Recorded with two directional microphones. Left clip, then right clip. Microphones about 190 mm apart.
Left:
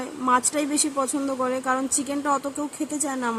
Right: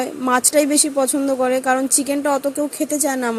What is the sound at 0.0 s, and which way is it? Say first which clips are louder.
A woman's voice: right 4 dB; 25° right (ahead or behind).